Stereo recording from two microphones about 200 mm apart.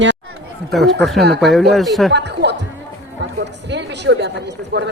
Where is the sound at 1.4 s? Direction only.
Centre (ahead or behind).